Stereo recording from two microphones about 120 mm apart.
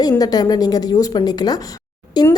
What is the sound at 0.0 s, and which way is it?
A woman's voice, 30° left (ahead or behind).